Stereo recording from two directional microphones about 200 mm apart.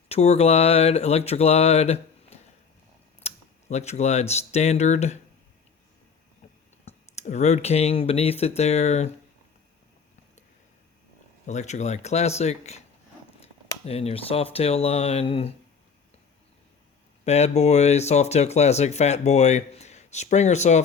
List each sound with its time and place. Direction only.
0.1 s speech: 30° left (ahead or behind)
6.8 s speech: 35° left (ahead or behind)
11.4 s speech: 35° left (ahead or behind)
17.2 s speech: 35° left (ahead or behind)